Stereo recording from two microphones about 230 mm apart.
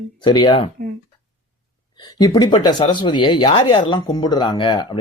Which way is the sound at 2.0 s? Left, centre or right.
Centre.